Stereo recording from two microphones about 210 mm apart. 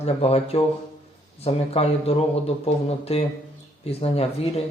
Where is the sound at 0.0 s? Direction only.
30° left (ahead or behind).